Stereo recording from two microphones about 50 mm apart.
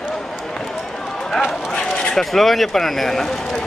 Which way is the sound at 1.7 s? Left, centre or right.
Centre.